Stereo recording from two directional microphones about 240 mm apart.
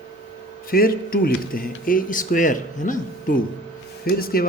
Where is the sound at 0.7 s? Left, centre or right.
Left.